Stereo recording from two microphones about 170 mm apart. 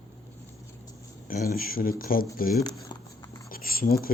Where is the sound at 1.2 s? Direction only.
55° left (ahead or behind).